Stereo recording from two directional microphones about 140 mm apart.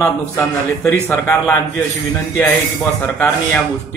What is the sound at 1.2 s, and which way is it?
Speech, 15° left (ahead or behind).